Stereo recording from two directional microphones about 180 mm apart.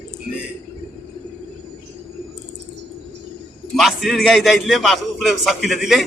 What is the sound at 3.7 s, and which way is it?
A man's voice, centre (ahead or behind).